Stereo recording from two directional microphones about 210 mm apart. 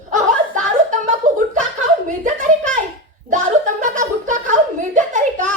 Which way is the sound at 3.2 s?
35° right (ahead or behind).